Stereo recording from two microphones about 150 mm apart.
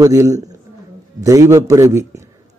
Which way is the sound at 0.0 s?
25° right (ahead or behind).